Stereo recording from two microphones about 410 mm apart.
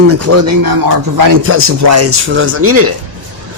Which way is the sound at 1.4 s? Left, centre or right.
Right.